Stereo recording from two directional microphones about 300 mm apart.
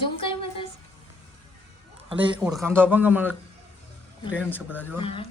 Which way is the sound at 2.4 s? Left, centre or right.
Centre.